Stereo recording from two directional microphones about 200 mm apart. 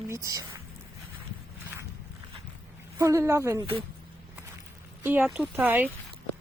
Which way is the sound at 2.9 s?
15° right (ahead or behind).